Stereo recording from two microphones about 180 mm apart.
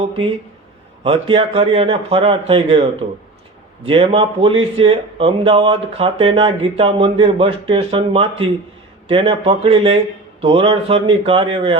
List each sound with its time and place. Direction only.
1.0 s speech: 30° right (ahead or behind)
3.8 s speech: 30° right (ahead or behind)